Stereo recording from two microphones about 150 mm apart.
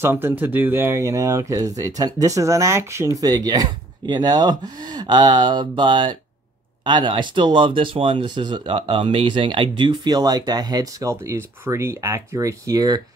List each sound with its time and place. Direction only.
0.0 s speech: 15° right (ahead or behind)